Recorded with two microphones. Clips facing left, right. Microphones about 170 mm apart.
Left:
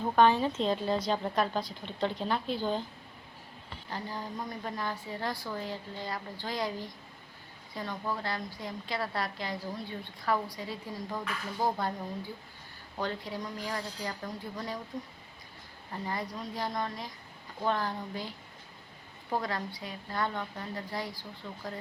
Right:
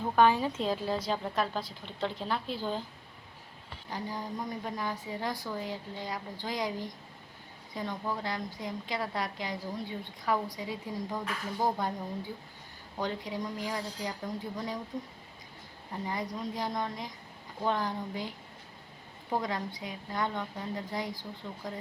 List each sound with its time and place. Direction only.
0.2 s a woman's voice: 10° right (ahead or behind)
3.8 s a woman's voice: 15° right (ahead or behind)
13.0 s a woman's voice: 15° right (ahead or behind)
15.9 s a woman's voice: 15° right (ahead or behind)